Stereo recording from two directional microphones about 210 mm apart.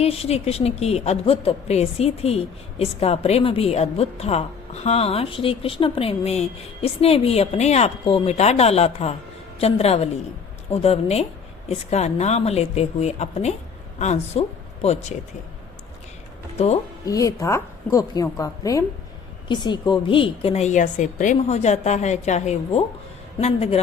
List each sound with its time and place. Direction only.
0.0 s a woman's voice: 30° left (ahead or behind)
16.6 s a woman's voice: 30° left (ahead or behind)
17.1 s a woman's voice: 15° left (ahead or behind)